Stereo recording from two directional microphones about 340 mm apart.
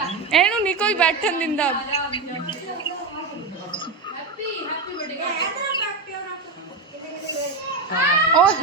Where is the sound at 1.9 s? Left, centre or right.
Centre.